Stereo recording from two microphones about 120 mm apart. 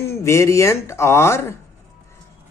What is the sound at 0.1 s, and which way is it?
Speech, 25° left (ahead or behind).